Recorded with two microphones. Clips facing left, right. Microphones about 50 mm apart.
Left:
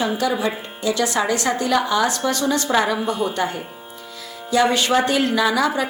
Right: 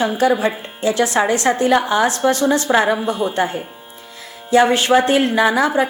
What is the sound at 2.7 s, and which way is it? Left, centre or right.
A woman's voice, right.